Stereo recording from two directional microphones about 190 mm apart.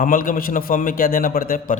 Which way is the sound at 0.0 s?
45° left (ahead or behind).